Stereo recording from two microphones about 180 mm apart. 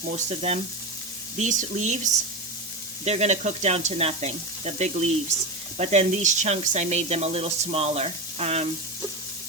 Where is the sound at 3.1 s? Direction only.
40° right (ahead or behind).